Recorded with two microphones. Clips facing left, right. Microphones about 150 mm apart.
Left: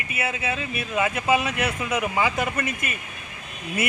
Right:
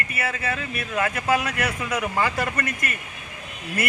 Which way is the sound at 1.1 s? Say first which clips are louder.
Left 1 dB; 20° left (ahead or behind).